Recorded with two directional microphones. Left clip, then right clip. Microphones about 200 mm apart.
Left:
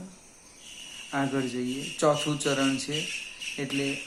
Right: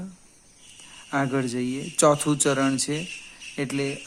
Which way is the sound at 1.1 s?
55° right (ahead or behind).